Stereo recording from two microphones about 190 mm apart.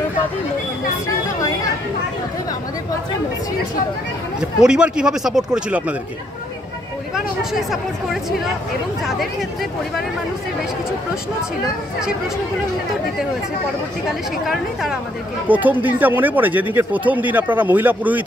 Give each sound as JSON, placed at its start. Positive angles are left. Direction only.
{"t": 1.0, "sound": "a sound", "side_deg": 20}
{"t": 4.4, "sound": "speech", "side_deg": -5}
{"t": 7.5, "sound": "speech", "side_deg": 0}
{"t": 14.0, "sound": "speech", "side_deg": 0}